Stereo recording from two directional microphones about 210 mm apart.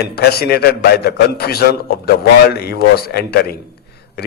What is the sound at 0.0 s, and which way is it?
A man's voice, 50° left (ahead or behind).